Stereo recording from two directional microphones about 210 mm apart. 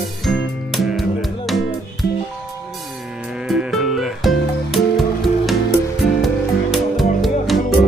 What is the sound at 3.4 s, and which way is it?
Music, centre (ahead or behind).